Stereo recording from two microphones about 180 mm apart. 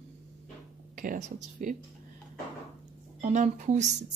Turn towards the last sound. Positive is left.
turn(degrees=-40)  # may be behind; listen again after turning